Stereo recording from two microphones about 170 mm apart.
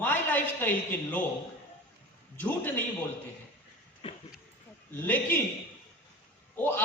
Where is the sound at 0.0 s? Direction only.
10° left (ahead or behind).